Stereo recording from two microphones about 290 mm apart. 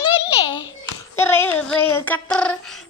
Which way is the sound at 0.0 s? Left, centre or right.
Centre.